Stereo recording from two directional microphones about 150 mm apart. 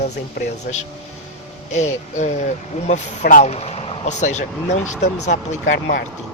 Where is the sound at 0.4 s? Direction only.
90° left.